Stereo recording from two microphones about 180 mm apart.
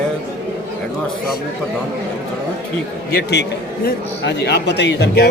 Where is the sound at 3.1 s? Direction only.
65° left (ahead or behind).